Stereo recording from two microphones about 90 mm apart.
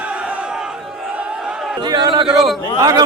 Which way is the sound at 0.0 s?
15° right (ahead or behind).